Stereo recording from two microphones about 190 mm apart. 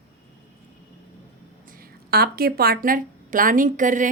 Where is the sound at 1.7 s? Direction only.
50° right (ahead or behind).